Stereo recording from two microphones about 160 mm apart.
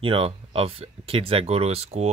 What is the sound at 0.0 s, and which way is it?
Speech, 35° right (ahead or behind).